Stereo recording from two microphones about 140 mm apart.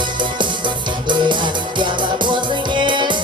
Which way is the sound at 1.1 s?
35° right (ahead or behind).